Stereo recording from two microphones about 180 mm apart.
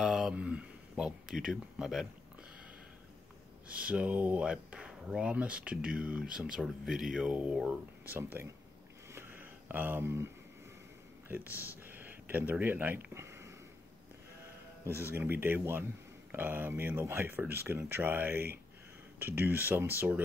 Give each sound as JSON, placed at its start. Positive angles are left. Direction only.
{"t": 0.0, "sound": "speech", "side_deg": 0}
{"t": 3.6, "sound": "speech", "side_deg": -5}
{"t": 9.1, "sound": "a sound", "side_deg": -10}
{"t": 11.2, "sound": "speech", "side_deg": -10}
{"t": 11.5, "sound": "speech", "side_deg": 15}
{"t": 11.9, "sound": "speech", "side_deg": -10}
{"t": 15.1, "sound": "speech", "side_deg": -10}